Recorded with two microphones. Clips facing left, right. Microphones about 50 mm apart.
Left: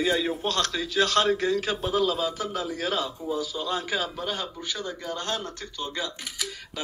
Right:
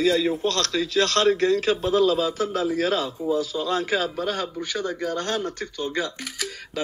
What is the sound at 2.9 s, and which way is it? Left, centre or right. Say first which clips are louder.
Speech: right 5 dB; centre.